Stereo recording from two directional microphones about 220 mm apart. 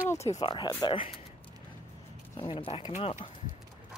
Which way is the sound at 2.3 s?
20° left (ahead or behind).